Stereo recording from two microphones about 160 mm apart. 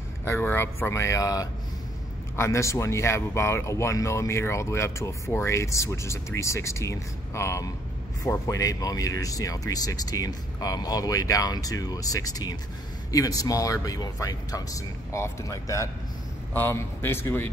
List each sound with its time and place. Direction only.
0.2 s speech: 15° left (ahead or behind)